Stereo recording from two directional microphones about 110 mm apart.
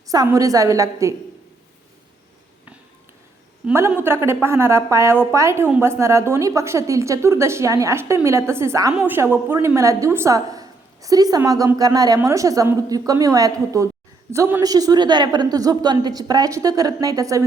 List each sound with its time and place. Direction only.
0.3 s a woman's voice: 30° right (ahead or behind)
3.7 s a woman's voice: 20° right (ahead or behind)
14.6 s a woman's voice: 35° right (ahead or behind)